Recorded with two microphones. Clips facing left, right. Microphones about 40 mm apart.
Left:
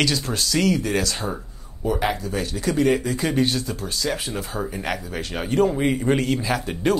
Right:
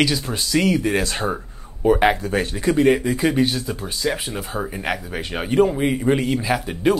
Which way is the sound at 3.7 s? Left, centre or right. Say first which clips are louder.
Right 2 dB; centre.